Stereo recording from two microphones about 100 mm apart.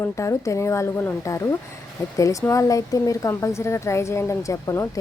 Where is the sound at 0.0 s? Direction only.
30° left (ahead or behind).